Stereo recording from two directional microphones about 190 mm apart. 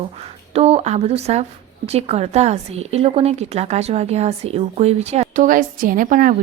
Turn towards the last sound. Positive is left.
turn(degrees=-45)  # may be behind; listen again after turning